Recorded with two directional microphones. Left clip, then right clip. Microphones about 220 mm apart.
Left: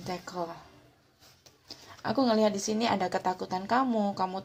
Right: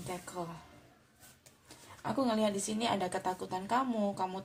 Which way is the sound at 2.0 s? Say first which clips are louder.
Left 6 dB; 35° left (ahead or behind).